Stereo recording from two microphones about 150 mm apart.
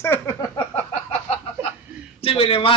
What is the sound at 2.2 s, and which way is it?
Speech, 40° left (ahead or behind).